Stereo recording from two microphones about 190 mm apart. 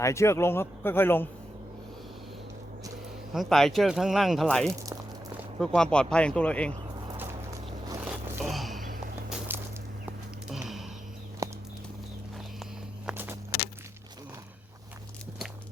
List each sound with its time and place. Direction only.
0.0 s a man's voice: 15° left (ahead or behind)
3.3 s speech: centre (ahead or behind)
8.0 s a sound: 5° right (ahead or behind)
9.5 s a sound: 10° right (ahead or behind)
11.4 s horse: 15° right (ahead or behind)
13.1 s walk: 10° right (ahead or behind)